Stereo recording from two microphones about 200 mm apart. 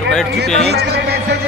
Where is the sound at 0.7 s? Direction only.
55° right (ahead or behind).